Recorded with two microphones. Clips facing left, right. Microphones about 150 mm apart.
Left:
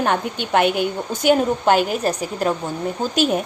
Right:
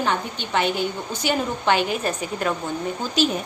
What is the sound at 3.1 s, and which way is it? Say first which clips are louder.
Speech: left 2 dB; 55° left (ahead or behind).